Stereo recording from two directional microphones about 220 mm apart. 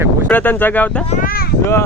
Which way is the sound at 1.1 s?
40° left (ahead or behind).